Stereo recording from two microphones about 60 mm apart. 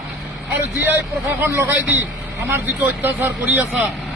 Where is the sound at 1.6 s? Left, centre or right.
Right.